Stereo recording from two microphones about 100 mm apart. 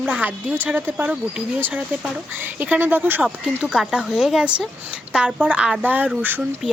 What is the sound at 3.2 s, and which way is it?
Speech, 5° right (ahead or behind).